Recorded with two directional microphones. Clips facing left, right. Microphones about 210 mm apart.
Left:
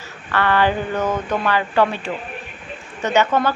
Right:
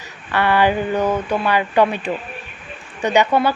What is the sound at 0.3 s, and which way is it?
Speech, 15° right (ahead or behind).